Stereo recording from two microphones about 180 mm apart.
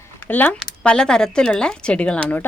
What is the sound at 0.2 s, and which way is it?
A woman's voice, 10° left (ahead or behind).